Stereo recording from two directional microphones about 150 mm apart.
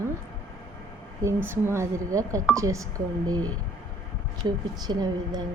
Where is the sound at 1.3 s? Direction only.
15° right (ahead or behind).